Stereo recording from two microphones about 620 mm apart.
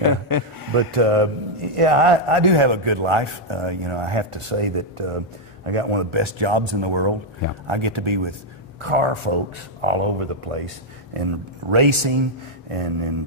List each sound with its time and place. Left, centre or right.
0.3 s a sound: left
0.7 s a man's voice: right
11.7 s a man's voice: right